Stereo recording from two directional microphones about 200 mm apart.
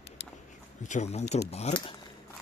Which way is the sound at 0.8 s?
35° left (ahead or behind).